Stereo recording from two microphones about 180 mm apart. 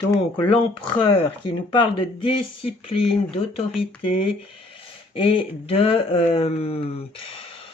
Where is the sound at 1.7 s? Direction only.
30° left (ahead or behind).